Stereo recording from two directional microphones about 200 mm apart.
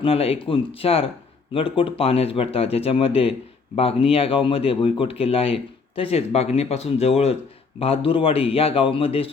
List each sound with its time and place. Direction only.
0.0 s speech: 30° left (ahead or behind)